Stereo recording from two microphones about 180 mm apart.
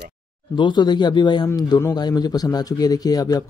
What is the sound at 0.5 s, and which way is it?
Speech, 25° left (ahead or behind).